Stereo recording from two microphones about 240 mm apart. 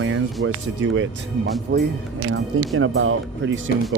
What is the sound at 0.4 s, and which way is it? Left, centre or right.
Speech, right.